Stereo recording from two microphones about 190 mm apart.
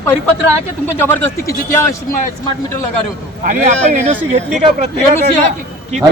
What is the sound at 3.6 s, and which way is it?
Speech, 35° right (ahead or behind).